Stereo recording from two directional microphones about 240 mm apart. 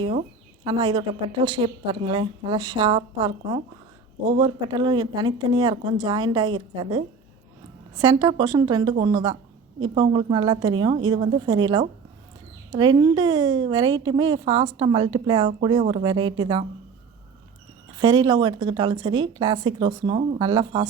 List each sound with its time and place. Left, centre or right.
0.6 s a woman's voice: centre
17.9 s a woman's voice: centre